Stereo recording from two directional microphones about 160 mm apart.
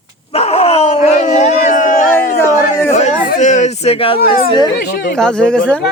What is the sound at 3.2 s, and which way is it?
Speech, 55° left (ahead or behind).